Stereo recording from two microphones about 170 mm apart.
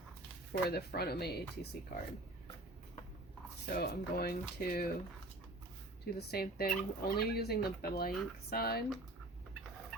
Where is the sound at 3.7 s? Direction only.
65° left (ahead or behind).